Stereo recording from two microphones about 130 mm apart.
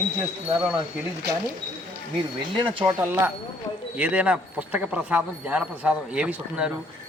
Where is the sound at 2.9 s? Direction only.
15° right (ahead or behind).